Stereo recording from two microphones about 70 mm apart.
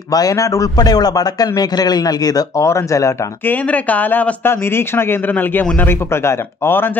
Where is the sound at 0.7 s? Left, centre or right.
Left.